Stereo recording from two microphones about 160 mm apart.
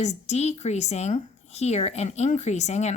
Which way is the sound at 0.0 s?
45° left (ahead or behind).